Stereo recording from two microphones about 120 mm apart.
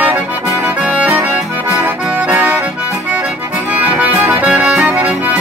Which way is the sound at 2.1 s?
15° right (ahead or behind).